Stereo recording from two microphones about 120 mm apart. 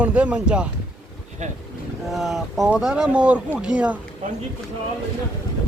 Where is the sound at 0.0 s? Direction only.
10° right (ahead or behind).